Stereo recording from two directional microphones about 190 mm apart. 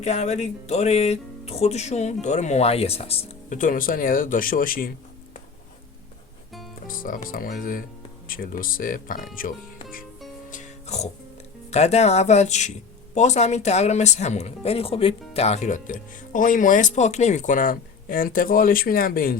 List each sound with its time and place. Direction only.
0.0 s speech: 35° left (ahead or behind)
6.8 s speech: 45° left (ahead or behind)
10.5 s music: 40° left (ahead or behind)
11.7 s speech: 35° left (ahead or behind)